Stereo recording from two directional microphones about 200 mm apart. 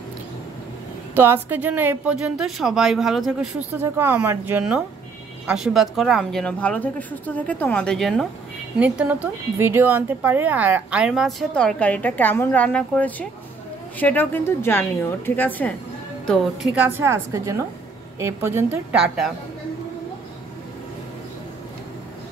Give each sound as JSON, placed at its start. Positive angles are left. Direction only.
{"t": 1.1, "sound": "a woman's voice", "side_deg": -10}
{"t": 3.7, "sound": "a woman's voice", "side_deg": -10}
{"t": 17.0, "sound": "a woman's voice", "side_deg": -15}